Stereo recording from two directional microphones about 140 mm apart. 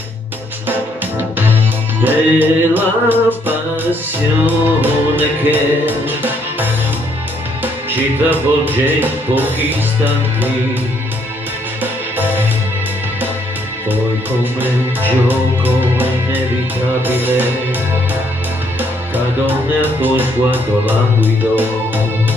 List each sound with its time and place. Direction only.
2.0 s music: 15° right (ahead or behind)
11.8 s music: 15° right (ahead or behind)
14.4 s music: 15° right (ahead or behind)
18.8 s speech: 15° right (ahead or behind)